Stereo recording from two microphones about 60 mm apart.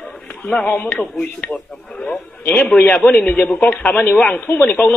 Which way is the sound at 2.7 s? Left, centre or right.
Centre.